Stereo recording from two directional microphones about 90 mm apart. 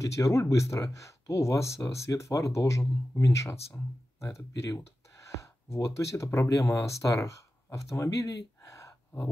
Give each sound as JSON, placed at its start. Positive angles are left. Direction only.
{"t": 0.0, "sound": "speech", "side_deg": 35}